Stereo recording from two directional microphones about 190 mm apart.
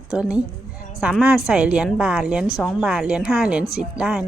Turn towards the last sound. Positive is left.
turn(degrees=-5)  # may be behind; listen again after turning